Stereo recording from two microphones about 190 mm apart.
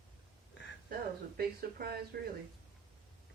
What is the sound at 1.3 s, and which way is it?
Speech, 55° right (ahead or behind).